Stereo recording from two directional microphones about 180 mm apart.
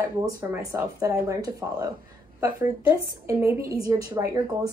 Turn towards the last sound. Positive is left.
turn(degrees=-15)  # may be behind; listen again after turning